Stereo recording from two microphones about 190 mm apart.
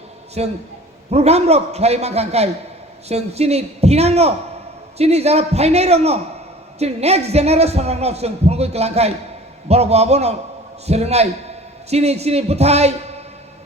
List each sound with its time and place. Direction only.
0.4 s a woman's voice: 35° right (ahead or behind)